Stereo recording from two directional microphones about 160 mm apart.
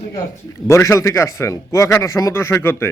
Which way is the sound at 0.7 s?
15° left (ahead or behind).